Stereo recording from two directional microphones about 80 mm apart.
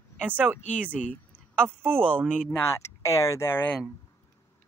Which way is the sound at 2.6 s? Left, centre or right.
Left.